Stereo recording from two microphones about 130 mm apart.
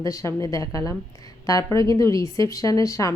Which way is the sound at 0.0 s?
25° left (ahead or behind).